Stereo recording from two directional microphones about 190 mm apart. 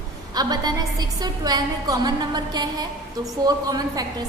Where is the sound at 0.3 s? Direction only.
20° right (ahead or behind).